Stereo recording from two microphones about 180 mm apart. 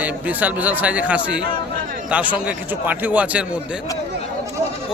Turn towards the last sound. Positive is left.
turn(degrees=-10)  # may be behind; listen again after turning